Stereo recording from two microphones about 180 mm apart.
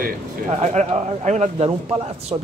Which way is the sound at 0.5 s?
40° right (ahead or behind).